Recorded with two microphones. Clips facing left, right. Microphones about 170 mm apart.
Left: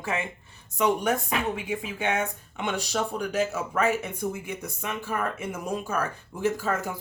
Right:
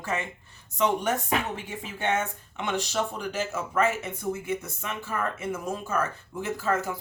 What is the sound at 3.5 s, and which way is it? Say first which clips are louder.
Speech: even; 15° left (ahead or behind).